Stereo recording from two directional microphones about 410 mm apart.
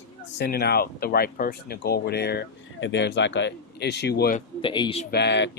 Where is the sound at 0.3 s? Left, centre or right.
Left.